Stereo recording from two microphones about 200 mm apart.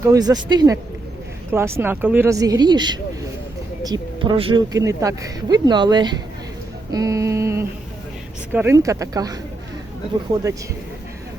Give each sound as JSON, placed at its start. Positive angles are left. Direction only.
{"t": 0.0, "sound": "speech", "side_deg": -20}
{"t": 4.2, "sound": "speech", "side_deg": -25}